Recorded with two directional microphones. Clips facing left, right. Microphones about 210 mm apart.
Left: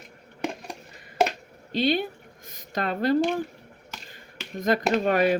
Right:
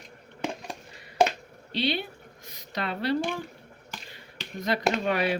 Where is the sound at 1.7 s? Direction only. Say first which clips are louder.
Left 5 dB; 45° left (ahead or behind).